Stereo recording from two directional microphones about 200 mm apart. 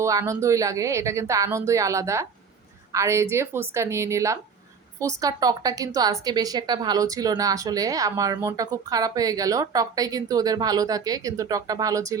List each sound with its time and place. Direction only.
0.0 s speech: 15° right (ahead or behind)